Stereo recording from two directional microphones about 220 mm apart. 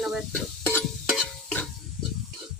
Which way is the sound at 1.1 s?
Centre (ahead or behind).